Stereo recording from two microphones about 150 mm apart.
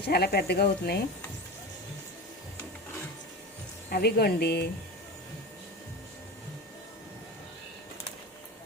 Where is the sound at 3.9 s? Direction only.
90° left.